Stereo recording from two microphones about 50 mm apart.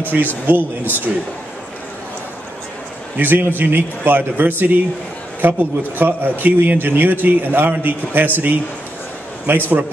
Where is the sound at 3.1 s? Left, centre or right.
Right.